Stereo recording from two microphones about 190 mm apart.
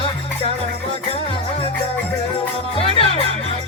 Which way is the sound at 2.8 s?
30° left (ahead or behind).